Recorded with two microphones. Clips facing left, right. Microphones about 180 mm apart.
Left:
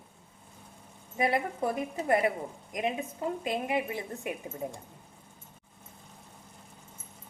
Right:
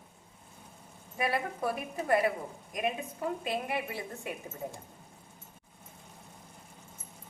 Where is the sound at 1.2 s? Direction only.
20° left (ahead or behind).